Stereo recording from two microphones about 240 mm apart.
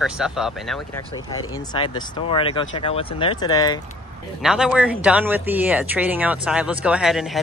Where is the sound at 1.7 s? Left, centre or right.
Centre.